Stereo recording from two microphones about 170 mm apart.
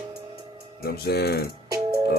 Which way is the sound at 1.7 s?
20° right (ahead or behind).